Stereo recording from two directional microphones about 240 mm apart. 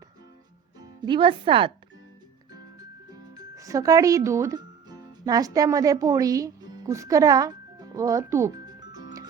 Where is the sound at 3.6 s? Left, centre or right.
Centre.